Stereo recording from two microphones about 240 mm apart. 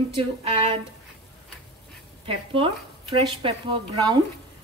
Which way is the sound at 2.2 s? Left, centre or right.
Right.